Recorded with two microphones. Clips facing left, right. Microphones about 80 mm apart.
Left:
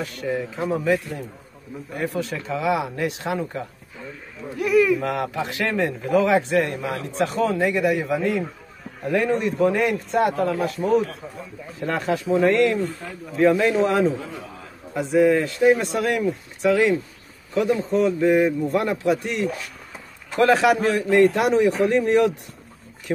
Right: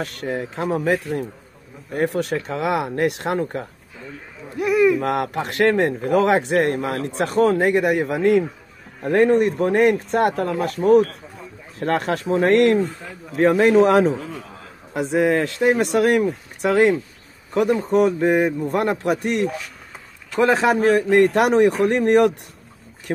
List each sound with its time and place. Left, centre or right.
0.0 s speech: right
4.6 s speech: right
5.0 s speech: right
20.3 s a man's voice: right
21.2 s speech: right